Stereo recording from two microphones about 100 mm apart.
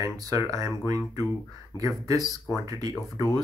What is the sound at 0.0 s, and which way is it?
Speech, 35° right (ahead or behind).